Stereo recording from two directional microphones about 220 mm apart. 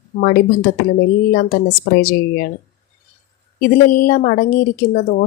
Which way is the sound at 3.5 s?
40° left (ahead or behind).